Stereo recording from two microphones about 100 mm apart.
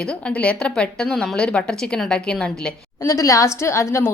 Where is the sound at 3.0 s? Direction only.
35° left (ahead or behind).